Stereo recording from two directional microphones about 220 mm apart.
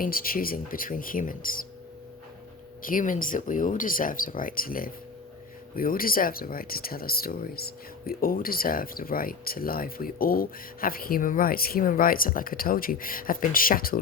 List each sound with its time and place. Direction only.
0.0 s speech: 40° left (ahead or behind)
2.8 s speech: 40° left (ahead or behind)